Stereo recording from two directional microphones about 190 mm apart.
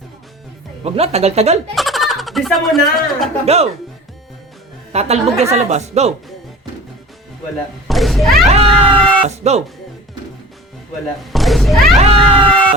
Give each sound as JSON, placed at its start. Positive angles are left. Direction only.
{"t": 0.9, "sound": "a woman's voice", "side_deg": -35}
{"t": 1.7, "sound": "speech", "side_deg": 0}
{"t": 3.4, "sound": "a woman's voice", "side_deg": -35}
{"t": 4.9, "sound": "a woman's voice", "side_deg": -35}
{"t": 7.9, "sound": "a sound", "side_deg": 0}
{"t": 8.4, "sound": "a sound", "side_deg": -30}
{"t": 9.2, "sound": "a woman's voice", "side_deg": -35}
{"t": 11.3, "sound": "speech", "side_deg": 0}
{"t": 11.9, "sound": "speech", "side_deg": -30}